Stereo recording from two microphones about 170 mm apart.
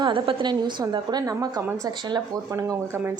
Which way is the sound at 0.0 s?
30° right (ahead or behind).